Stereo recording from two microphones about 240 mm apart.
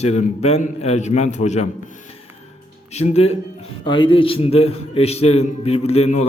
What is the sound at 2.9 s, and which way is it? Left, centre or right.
A man's voice, left.